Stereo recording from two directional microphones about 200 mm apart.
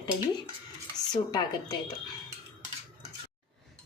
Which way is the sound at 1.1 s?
20° left (ahead or behind).